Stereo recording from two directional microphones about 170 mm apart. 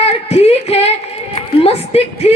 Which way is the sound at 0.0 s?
35° left (ahead or behind).